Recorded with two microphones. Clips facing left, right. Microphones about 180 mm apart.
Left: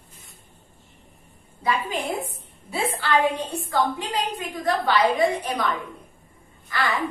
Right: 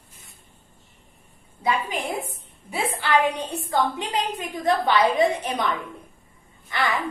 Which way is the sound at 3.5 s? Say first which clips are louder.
Even; 25° right (ahead or behind).